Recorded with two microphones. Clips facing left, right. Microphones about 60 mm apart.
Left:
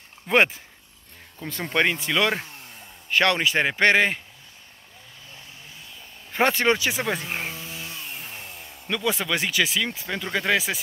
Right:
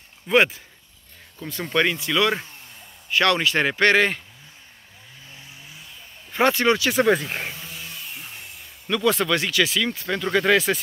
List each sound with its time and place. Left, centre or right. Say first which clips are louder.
0.3 s speech: right 1 dB; left
6.3 s speech: right 2 dB; left
8.8 s speech: right 5 dB; centre